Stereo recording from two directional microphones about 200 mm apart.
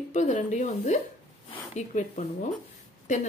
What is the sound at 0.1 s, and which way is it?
Speech, 35° left (ahead or behind).